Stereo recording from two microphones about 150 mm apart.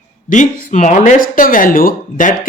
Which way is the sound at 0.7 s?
50° left (ahead or behind).